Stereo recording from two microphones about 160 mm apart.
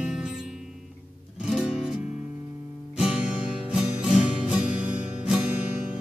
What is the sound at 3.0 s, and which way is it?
Music, 5° right (ahead or behind).